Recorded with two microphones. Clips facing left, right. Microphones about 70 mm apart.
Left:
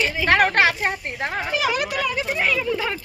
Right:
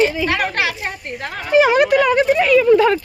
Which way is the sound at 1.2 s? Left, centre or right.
Left.